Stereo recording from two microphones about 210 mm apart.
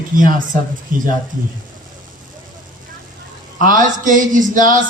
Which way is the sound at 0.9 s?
40° right (ahead or behind).